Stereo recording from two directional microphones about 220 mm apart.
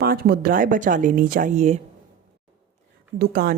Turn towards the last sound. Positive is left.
turn(degrees=-45)  # may be behind; listen again after turning